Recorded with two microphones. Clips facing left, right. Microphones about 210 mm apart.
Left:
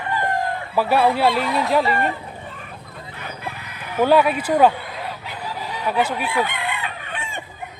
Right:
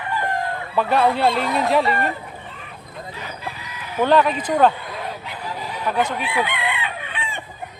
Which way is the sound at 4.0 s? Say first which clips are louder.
Left 1 dB; 10° left (ahead or behind).